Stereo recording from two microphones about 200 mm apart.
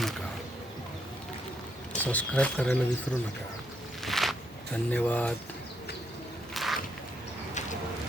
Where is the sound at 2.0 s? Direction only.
5° left (ahead or behind).